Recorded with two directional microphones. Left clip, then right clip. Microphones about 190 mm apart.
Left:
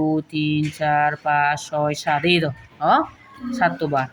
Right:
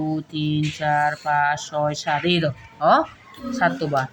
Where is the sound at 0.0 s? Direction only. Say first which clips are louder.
Left 4 dB; 20° left (ahead or behind).